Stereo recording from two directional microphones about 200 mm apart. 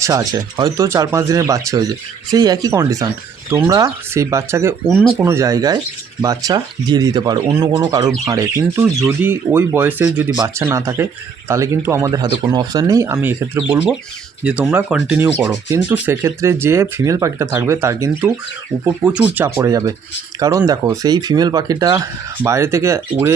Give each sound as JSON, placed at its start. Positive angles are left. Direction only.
{"t": 0.0, "sound": "speech", "side_deg": -15}